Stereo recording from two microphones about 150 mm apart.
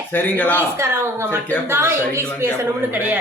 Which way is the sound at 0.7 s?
15° right (ahead or behind).